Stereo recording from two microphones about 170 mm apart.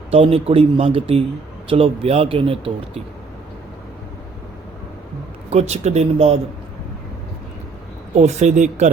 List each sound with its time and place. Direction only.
0.1 s a man's voice: 35° right (ahead or behind)
5.5 s a man's voice: 40° right (ahead or behind)
8.1 s speech: 40° right (ahead or behind)